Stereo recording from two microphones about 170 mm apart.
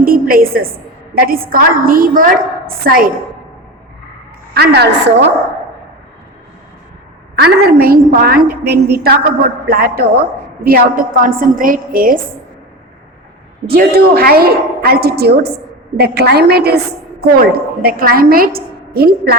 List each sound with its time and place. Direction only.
0.0 s a sound: 60° right (ahead or behind)
1.1 s a woman's voice: 60° right (ahead or behind)
4.5 s a woman's voice: 75° right (ahead or behind); by 5.3 s 90° right
7.3 s a woman's voice: 60° right (ahead or behind)
13.7 s a woman's voice: 65° right (ahead or behind)